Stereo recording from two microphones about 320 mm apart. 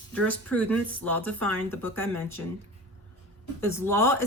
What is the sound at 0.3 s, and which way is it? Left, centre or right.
A woman's voice, centre.